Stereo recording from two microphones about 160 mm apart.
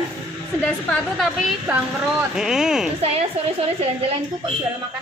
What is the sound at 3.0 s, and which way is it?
Speech, 40° right (ahead or behind).